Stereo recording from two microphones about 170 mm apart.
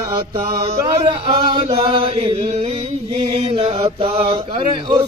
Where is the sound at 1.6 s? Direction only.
35° right (ahead or behind).